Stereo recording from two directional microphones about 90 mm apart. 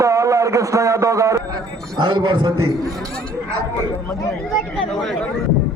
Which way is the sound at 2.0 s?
60° right (ahead or behind).